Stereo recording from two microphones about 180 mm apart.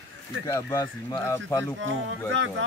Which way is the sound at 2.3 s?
90° right.